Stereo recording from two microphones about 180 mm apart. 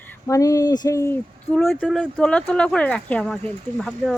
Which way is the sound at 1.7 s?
Centre (ahead or behind).